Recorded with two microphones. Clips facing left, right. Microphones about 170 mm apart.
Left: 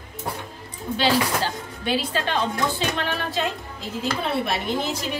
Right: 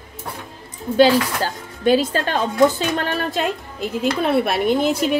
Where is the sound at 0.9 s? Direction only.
45° right (ahead or behind).